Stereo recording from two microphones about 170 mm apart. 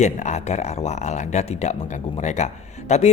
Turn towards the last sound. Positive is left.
turn(degrees=40)  # may be behind; listen again after turning